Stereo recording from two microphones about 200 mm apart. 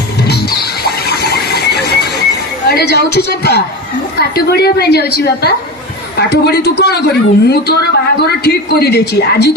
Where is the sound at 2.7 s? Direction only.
55° left (ahead or behind).